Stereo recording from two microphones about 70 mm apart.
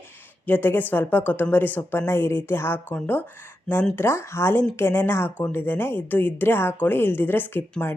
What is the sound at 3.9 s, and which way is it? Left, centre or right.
A woman's voice, left.